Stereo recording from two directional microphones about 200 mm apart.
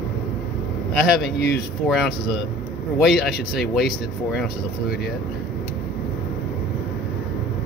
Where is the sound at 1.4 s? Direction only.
55° left (ahead or behind).